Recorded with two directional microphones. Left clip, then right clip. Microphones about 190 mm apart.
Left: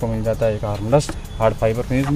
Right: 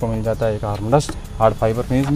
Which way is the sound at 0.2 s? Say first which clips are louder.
Left 2 dB; 5° right (ahead or behind).